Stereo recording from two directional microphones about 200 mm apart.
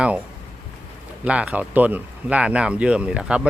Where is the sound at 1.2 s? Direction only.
5° right (ahead or behind).